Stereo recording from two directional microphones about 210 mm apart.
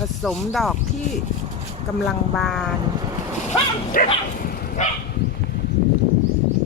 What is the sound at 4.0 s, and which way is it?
Speech, 40° left (ahead or behind).